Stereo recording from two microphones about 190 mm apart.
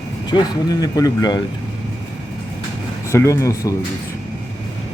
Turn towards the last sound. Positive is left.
turn(degrees=15)  # may be behind; listen again after turning